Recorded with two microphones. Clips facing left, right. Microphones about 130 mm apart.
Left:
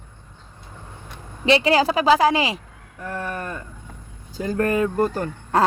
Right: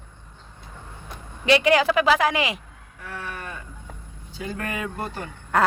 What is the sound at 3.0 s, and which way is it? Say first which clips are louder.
Speech: left 6 dB; 45° left (ahead or behind).